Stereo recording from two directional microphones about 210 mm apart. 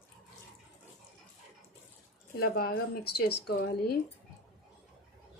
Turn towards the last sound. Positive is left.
turn(degrees=45)  # may be behind; listen again after turning